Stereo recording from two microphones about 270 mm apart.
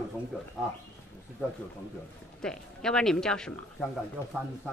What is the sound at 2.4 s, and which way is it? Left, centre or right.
Speech, centre.